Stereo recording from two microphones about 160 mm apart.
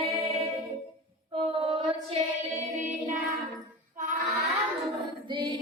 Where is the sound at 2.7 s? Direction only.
50° right (ahead or behind).